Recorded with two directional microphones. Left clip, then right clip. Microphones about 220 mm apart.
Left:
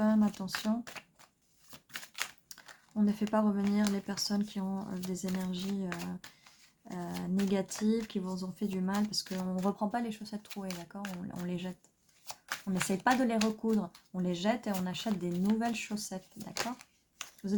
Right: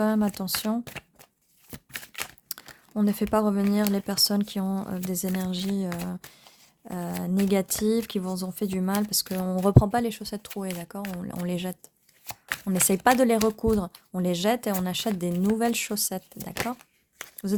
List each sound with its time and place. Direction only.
0.0 s speech: 55° right (ahead or behind)
2.5 s crumpling: 55° right (ahead or behind)
2.9 s speech: 55° right (ahead or behind)
12.2 s shuffling cards: 20° right (ahead or behind)
12.6 s speech: 50° right (ahead or behind)